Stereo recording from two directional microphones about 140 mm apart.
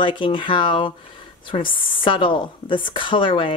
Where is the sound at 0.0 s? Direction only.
35° left (ahead or behind).